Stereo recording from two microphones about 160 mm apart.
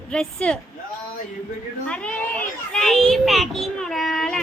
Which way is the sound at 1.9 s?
5° left (ahead or behind).